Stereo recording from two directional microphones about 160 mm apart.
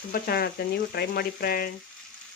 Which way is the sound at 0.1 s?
75° left (ahead or behind).